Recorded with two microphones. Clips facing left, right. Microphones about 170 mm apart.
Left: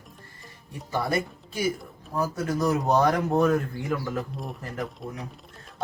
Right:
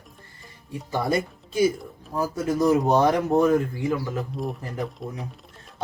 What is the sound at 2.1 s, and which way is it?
Speech, 25° right (ahead or behind).